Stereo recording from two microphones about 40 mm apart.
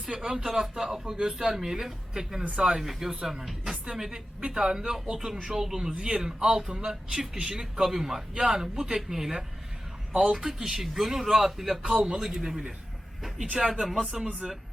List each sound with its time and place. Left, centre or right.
0.0 s a man's voice: centre
2.5 s a man's voice: right
2.8 s speech: centre
3.1 s a man's voice: centre